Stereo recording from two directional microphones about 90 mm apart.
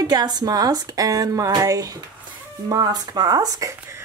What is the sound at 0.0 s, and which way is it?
Speech, 50° right (ahead or behind).